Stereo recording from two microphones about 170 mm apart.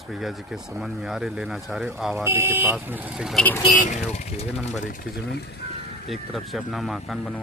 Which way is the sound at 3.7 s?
45° left (ahead or behind).